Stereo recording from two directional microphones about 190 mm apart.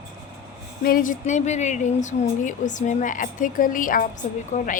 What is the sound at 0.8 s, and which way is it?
A woman's voice, 45° left (ahead or behind).